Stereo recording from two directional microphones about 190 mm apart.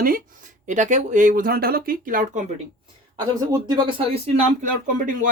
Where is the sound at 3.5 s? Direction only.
25° right (ahead or behind); by 5.3 s 45° right (ahead or behind).